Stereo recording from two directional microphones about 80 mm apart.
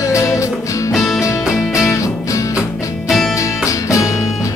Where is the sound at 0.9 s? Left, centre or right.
Centre.